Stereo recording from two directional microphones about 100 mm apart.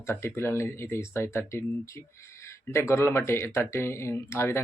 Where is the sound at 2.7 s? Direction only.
25° left (ahead or behind).